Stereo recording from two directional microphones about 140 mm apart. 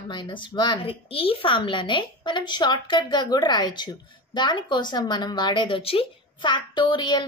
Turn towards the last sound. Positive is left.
turn(degrees=35)  # may be behind; listen again after turning